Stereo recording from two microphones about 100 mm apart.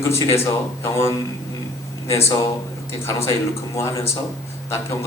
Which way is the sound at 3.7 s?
30° left (ahead or behind).